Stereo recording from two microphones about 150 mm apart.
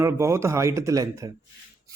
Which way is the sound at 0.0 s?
20° right (ahead or behind).